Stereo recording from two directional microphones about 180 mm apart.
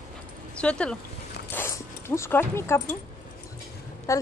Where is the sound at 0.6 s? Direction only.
5° left (ahead or behind).